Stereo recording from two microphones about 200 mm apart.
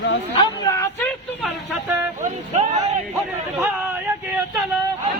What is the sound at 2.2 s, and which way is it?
Vehicle, 35° right (ahead or behind).